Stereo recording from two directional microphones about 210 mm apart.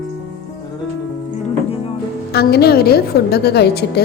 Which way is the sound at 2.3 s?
50° left (ahead or behind).